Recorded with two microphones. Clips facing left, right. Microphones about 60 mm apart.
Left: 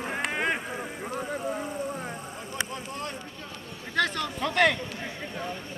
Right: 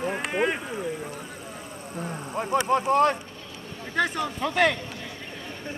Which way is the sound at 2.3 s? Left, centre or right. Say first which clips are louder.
Right 16 dB; right.